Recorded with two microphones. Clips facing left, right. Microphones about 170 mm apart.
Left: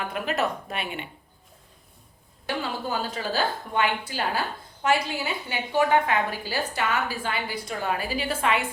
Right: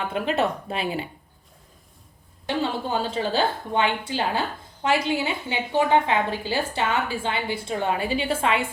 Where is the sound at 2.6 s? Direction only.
25° right (ahead or behind).